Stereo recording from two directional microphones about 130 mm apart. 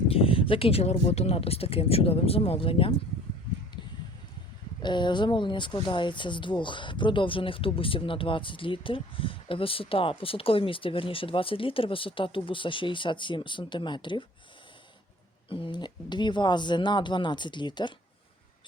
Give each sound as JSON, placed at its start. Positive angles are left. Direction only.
{"t": 0.1, "sound": "speech", "side_deg": 45}
{"t": 4.8, "sound": "speech", "side_deg": 35}
{"t": 15.4, "sound": "speech", "side_deg": 40}